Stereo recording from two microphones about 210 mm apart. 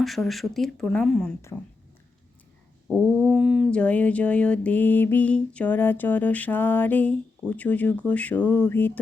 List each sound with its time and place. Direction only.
0.0 s speech: centre (ahead or behind)
2.8 s a sound: 10° right (ahead or behind)
3.2 s mantra: 5° right (ahead or behind)